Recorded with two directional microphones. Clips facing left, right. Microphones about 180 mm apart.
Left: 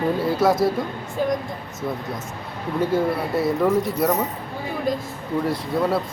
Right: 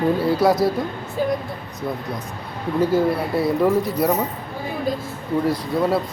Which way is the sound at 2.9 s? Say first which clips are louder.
Right 2 dB; centre (ahead or behind).